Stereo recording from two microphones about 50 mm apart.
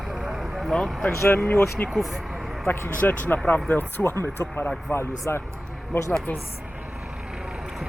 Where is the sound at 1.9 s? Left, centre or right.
Centre.